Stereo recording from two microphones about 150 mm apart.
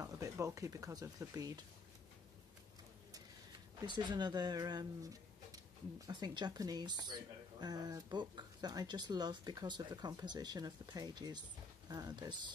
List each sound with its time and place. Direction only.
0.0 s speech: 20° right (ahead or behind)
3.8 s speech: 30° right (ahead or behind)